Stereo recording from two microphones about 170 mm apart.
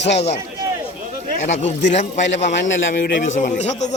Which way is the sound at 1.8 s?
45° left (ahead or behind).